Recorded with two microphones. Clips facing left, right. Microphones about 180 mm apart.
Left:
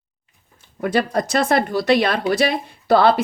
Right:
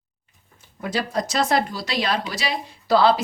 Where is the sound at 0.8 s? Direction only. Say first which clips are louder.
Left 5 dB; 60° left (ahead or behind).